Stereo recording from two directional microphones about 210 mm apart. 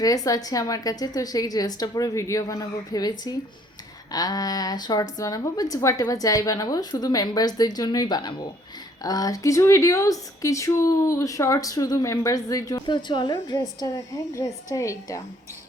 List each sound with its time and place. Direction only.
0.0 s speech: 15° left (ahead or behind)